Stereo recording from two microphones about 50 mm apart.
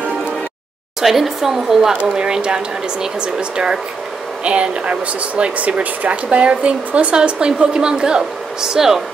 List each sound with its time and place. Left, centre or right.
1.0 s speech: centre